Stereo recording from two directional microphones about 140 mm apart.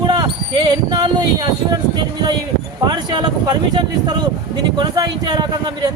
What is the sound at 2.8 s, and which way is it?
Speech, 35° right (ahead or behind).